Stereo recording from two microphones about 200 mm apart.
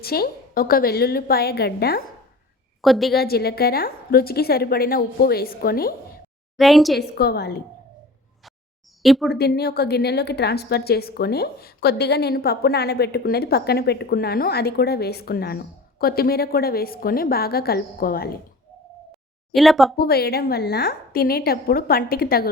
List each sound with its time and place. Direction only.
0.0 s a woman's voice: 50° left (ahead or behind)
2.8 s a woman's voice: centre (ahead or behind)
3.2 s a woman's voice: 50° left (ahead or behind)
6.6 s a woman's voice: centre (ahead or behind)
7.0 s a woman's voice: 55° left (ahead or behind)
9.0 s a woman's voice: centre (ahead or behind)
9.3 s a woman's voice: 50° left (ahead or behind)
19.5 s a woman's voice: centre (ahead or behind)
20.0 s a woman's voice: 50° left (ahead or behind)